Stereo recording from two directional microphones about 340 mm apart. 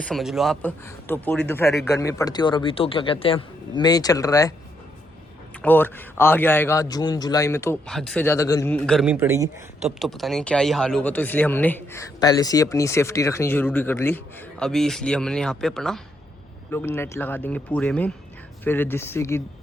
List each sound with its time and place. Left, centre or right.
0.0 s speech: centre
5.6 s a man's voice: centre